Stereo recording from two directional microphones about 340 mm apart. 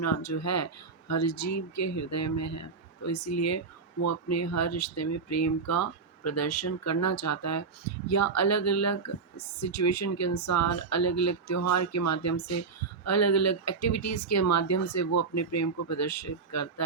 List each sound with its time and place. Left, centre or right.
0.0 s speech: left